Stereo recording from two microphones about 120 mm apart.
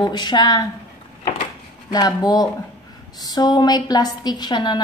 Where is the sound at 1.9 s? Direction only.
35° left (ahead or behind).